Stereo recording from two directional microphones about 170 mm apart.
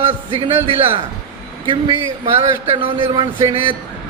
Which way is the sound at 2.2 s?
30° right (ahead or behind).